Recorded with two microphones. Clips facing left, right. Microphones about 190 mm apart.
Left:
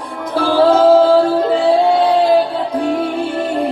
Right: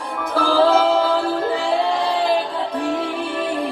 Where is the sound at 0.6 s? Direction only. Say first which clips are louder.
Left 8 dB; 35° left (ahead or behind).